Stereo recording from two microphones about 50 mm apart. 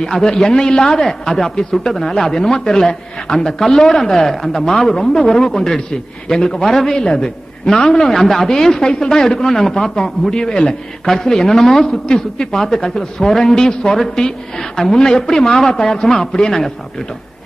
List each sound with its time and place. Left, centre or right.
0.0 s a man's voice: centre